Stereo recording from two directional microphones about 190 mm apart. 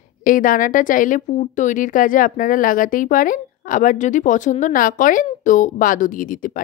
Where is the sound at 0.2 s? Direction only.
45° left (ahead or behind).